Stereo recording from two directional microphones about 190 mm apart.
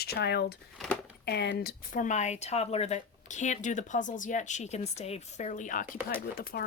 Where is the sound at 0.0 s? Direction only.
60° left (ahead or behind).